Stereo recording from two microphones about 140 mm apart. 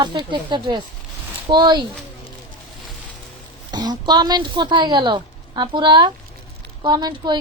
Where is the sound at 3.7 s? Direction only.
30° right (ahead or behind).